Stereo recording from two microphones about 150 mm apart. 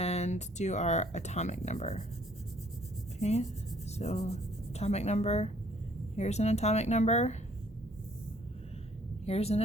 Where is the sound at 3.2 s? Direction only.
45° left (ahead or behind).